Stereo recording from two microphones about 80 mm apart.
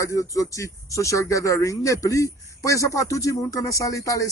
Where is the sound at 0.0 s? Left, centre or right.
Left.